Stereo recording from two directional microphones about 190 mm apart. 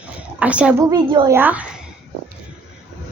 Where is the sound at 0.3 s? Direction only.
5° right (ahead or behind).